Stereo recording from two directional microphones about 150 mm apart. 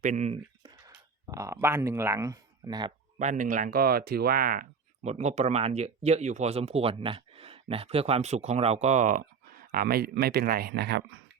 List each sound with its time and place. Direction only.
0.0 s speech: 50° right (ahead or behind)
1.3 s speech: 20° right (ahead or behind)
3.2 s speech: 55° right (ahead or behind); by 4.6 s 75° right (ahead or behind)
5.0 s speech: 50° right (ahead or behind); by 10.8 s 90° right